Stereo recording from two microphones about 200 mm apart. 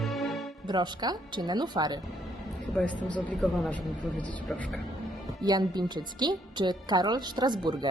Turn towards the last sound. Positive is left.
turn(degrees=-20)  # may be behind; listen again after turning